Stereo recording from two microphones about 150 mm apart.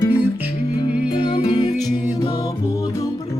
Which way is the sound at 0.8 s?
30° left (ahead or behind).